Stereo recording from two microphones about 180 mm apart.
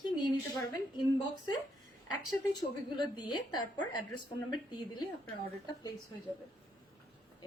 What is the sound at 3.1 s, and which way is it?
A woman's voice, 25° left (ahead or behind).